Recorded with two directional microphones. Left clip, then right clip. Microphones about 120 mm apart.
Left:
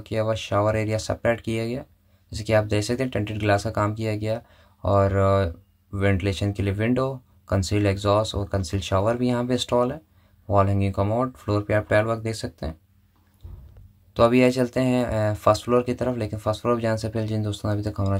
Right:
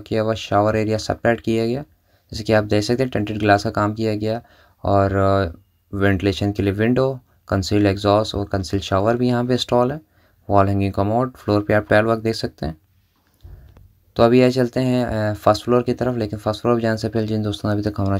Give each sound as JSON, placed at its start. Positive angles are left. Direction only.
{"t": 0.0, "sound": "speech", "side_deg": -30}
{"t": 14.1, "sound": "speech", "side_deg": -30}